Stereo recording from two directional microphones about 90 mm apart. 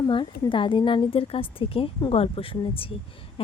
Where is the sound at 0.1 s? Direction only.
70° left (ahead or behind).